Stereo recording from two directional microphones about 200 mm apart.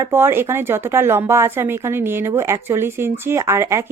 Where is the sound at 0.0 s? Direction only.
10° right (ahead or behind).